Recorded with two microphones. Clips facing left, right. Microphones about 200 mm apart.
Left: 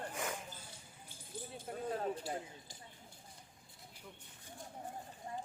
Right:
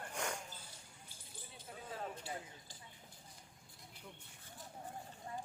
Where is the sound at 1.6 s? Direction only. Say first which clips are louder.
Left 7 dB; 50° left (ahead or behind).